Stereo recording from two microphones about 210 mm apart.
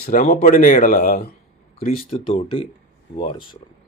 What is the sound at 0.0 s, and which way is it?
Speech, 40° left (ahead or behind).